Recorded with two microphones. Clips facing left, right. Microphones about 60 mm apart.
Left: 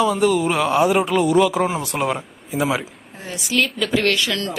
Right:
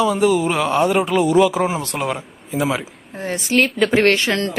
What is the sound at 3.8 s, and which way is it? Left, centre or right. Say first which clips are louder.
Speech: right 4 dB; right.